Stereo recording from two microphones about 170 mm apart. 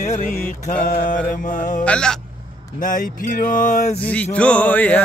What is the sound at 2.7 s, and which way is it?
Speech, 50° left (ahead or behind).